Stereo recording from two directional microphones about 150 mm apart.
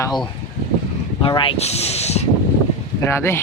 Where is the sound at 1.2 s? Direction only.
35° left (ahead or behind).